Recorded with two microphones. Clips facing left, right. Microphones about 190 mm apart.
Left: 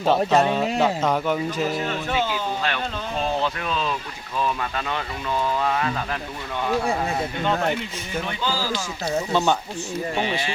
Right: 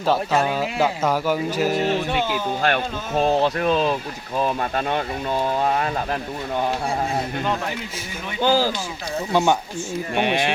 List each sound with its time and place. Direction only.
0.0 s speech: centre (ahead or behind)
2.6 s speech: 55° right (ahead or behind); by 6.1 s 35° right (ahead or behind)
8.4 s speech: 55° right (ahead or behind)
9.3 s speech: 15° right (ahead or behind)
10.2 s speech: 65° right (ahead or behind)